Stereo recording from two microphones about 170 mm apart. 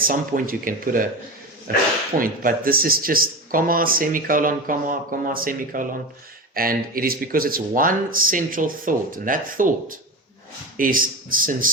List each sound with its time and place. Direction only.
0.0 s speech: 55° right (ahead or behind)